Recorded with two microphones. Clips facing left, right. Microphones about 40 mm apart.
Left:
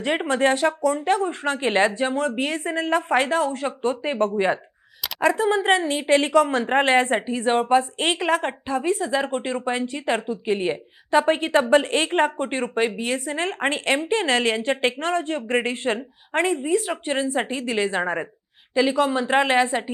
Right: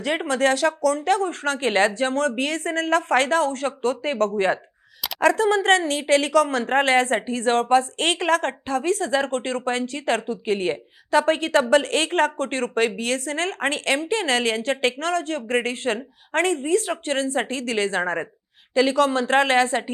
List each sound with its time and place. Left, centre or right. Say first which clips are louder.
0.3 s speech: even; left
11.1 s speech: even; left